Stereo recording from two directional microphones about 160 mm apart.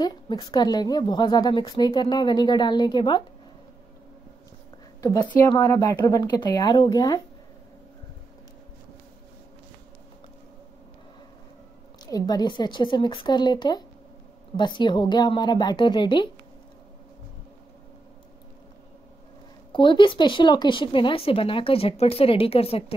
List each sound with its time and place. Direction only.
0.0 s a woman's voice: 25° left (ahead or behind)
5.6 s a woman's voice: 25° left (ahead or behind)
12.1 s a woman's voice: 25° left (ahead or behind)
19.7 s speech: 30° left (ahead or behind)